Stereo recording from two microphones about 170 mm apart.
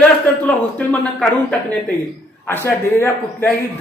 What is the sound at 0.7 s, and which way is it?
A man's voice, 5° left (ahead or behind).